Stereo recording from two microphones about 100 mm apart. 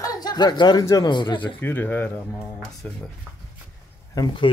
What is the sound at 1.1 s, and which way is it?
Speech, 50° left (ahead or behind).